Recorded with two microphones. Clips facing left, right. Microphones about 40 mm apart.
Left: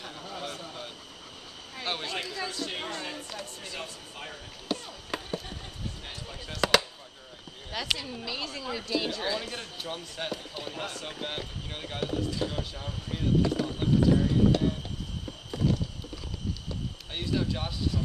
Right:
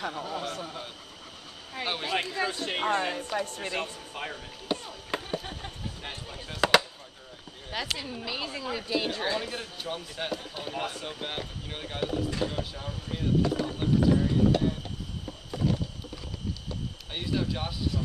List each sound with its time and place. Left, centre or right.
0.1 s speech: centre
1.9 s speech: centre
2.1 s speech: right
4.8 s chop: centre
8.0 s speech: centre
15.2 s a sound: centre
17.1 s speech: centre